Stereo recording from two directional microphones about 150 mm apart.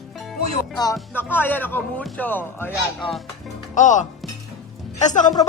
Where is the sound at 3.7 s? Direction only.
55° left (ahead or behind).